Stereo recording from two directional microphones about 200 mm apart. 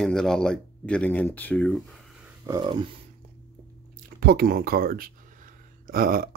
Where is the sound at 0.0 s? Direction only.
5° left (ahead or behind).